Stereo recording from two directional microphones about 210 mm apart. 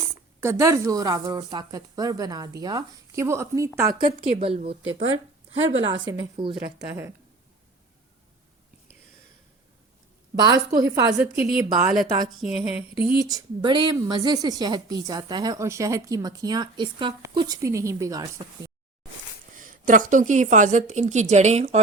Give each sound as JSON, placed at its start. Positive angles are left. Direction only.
{"t": 0.3, "sound": "a woman's voice", "side_deg": -15}
{"t": 3.9, "sound": "a woman's voice", "side_deg": -25}
{"t": 5.8, "sound": "a woman's voice", "side_deg": -20}
{"t": 10.3, "sound": "a woman's voice", "side_deg": -20}
{"t": 12.4, "sound": "a sound", "side_deg": 0}
{"t": 13.0, "sound": "speech", "side_deg": -50}
{"t": 13.2, "sound": "a woman's voice", "side_deg": -20}
{"t": 19.8, "sound": "a woman's voice", "side_deg": -40}